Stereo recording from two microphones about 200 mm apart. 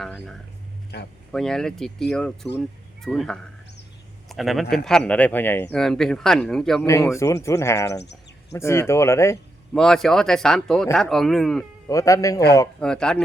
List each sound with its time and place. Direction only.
0.0 s speech: centre (ahead or behind)
0.9 s speech: 55° left (ahead or behind)
1.3 s speech: 5° left (ahead or behind)
6.8 s speech: 15° left (ahead or behind)
9.7 s speech: centre (ahead or behind)
11.9 s speech: 15° left (ahead or behind)
12.8 s speech: 5° left (ahead or behind)